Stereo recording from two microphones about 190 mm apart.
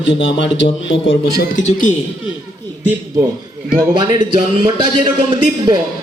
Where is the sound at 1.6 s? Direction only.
40° left (ahead or behind).